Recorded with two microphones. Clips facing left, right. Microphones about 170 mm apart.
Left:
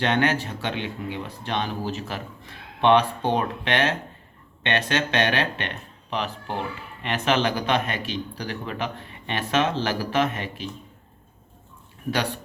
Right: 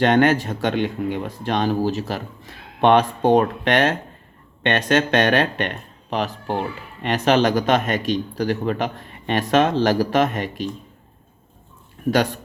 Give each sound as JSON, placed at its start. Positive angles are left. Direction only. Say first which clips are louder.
{"t": 0.0, "sound": "speech", "louder": "right 7 dB", "side_deg": -45}
{"t": 12.1, "sound": "speech", "louder": "right 7 dB", "side_deg": -45}